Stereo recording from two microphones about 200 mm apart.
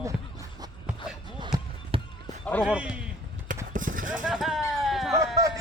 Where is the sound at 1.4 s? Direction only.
25° right (ahead or behind).